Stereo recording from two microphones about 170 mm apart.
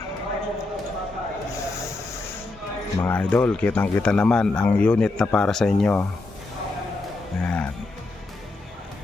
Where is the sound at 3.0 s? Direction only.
10° left (ahead or behind).